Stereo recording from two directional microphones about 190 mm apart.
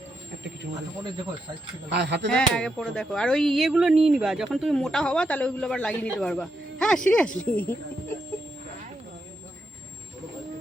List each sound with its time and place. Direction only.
1.9 s speech: 60° right (ahead or behind)
2.3 s speech: 5° left (ahead or behind)